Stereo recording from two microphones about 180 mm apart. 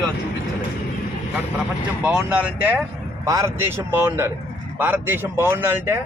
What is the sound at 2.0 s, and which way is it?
Speech, 5° right (ahead or behind).